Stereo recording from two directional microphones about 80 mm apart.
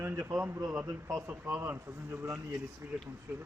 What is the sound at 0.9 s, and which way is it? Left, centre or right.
Speech, right.